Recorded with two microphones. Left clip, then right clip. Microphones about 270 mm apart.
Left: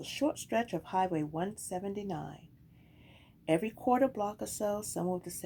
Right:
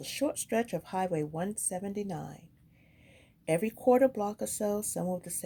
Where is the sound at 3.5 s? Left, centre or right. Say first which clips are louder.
Right 3 dB; right.